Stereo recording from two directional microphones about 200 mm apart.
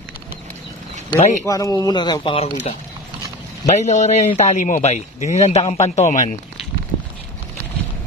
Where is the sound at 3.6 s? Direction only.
35° left (ahead or behind).